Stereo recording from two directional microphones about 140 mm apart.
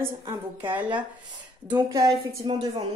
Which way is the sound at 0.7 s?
10° right (ahead or behind).